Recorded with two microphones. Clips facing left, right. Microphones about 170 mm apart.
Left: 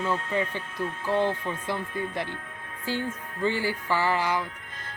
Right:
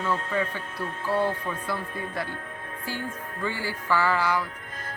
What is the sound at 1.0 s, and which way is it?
Speech, 20° left (ahead or behind).